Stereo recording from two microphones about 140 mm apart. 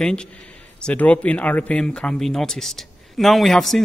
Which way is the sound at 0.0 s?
5° left (ahead or behind).